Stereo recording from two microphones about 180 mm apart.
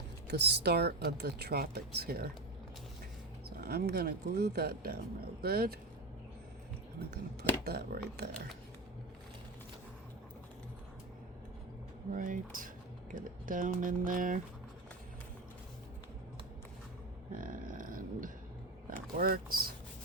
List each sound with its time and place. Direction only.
0.3 s speech: 70° right (ahead or behind)
3.6 s speech: 60° right (ahead or behind)
7.6 s speech: 60° right (ahead or behind)
12.1 s speech: 45° right (ahead or behind)
17.3 s a sound: 50° right (ahead or behind)
19.1 s speech: 55° right (ahead or behind)